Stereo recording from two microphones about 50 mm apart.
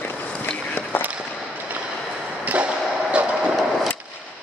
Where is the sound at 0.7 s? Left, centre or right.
Left.